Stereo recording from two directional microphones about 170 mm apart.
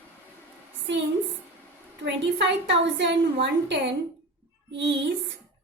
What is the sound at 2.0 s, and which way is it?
A woman's voice, 90° right.